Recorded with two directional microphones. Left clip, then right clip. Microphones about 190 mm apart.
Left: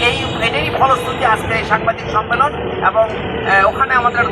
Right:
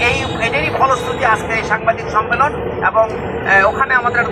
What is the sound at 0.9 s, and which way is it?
Speech, 20° right (ahead or behind).